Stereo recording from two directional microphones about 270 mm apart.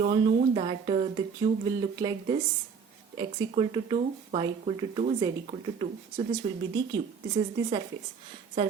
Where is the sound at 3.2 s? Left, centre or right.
Centre.